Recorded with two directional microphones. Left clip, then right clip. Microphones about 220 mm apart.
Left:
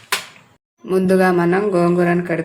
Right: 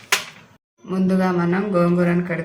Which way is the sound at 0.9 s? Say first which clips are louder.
Left 7 dB; 45° left (ahead or behind).